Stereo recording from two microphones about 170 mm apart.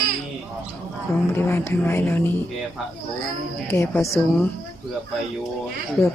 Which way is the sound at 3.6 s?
15° left (ahead or behind).